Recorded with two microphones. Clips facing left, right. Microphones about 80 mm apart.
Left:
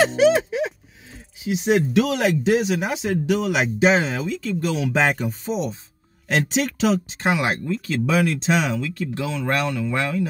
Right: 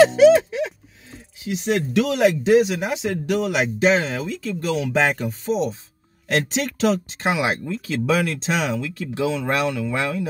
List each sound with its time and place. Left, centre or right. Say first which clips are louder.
0.1 s a sound: right 4 dB; centre
1.6 s speech: left 2 dB; centre
2.1 s speech: right 4 dB; centre